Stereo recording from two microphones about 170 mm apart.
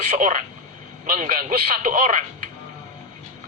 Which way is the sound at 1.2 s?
55° right (ahead or behind).